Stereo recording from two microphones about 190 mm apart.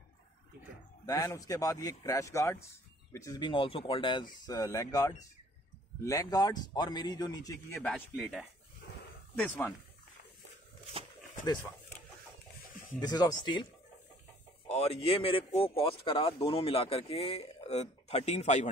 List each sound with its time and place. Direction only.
1.0 s a man's voice: 20° left (ahead or behind)
7.8 s speech: centre (ahead or behind)
8.8 s a sound: 60° left (ahead or behind)
9.3 s speech: 10° left (ahead or behind)
13.0 s a man's voice: 20° left (ahead or behind)
14.7 s speech: 35° left (ahead or behind)